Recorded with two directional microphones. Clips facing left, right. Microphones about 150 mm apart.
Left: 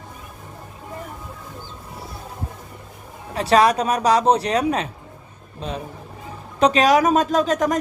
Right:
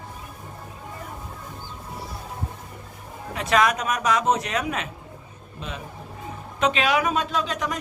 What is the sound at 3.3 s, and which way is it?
Speech, 35° left (ahead or behind).